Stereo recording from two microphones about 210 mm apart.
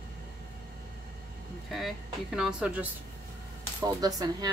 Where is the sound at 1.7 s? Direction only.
Centre (ahead or behind).